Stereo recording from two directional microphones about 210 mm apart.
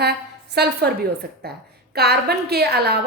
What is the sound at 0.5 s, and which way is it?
A woman's voice, 50° right (ahead or behind).